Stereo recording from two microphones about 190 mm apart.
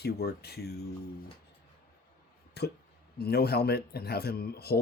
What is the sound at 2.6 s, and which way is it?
Speech, 60° left (ahead or behind).